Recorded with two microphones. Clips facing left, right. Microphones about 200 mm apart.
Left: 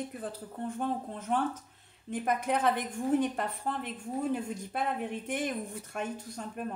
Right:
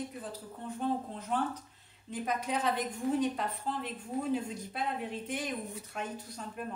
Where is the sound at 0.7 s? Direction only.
50° left (ahead or behind).